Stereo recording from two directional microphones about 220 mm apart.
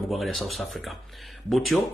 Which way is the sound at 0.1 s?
Centre (ahead or behind).